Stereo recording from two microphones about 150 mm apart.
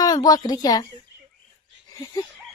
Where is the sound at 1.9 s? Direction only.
25° left (ahead or behind).